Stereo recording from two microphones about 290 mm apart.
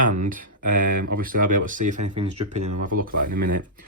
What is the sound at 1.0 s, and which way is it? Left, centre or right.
Speech, right.